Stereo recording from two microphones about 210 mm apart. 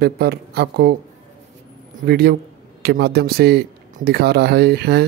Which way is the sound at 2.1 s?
50° right (ahead or behind).